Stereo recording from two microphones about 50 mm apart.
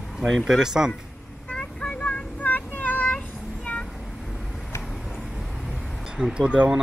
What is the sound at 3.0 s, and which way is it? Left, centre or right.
Child singing, left.